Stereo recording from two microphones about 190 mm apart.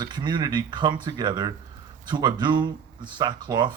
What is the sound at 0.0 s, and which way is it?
Speech, 20° right (ahead or behind).